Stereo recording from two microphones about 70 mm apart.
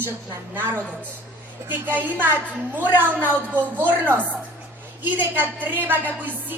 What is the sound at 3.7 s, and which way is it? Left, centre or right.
A woman's voice, right.